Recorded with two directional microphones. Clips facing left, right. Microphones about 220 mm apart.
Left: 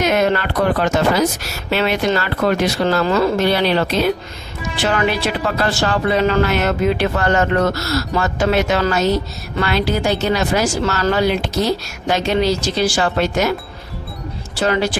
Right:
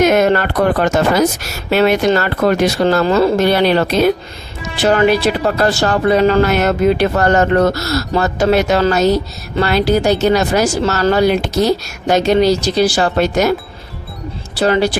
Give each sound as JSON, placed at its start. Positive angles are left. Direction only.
{"t": 0.0, "sound": "speech", "side_deg": -50}
{"t": 14.6, "sound": "speech", "side_deg": -35}